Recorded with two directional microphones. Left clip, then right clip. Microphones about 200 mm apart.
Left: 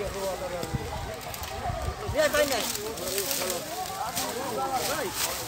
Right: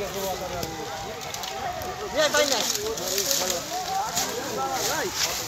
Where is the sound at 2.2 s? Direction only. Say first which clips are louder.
Right 2 dB; 35° left (ahead or behind).